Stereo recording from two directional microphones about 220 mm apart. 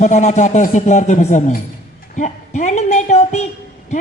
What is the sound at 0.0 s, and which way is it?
Speech, 35° left (ahead or behind).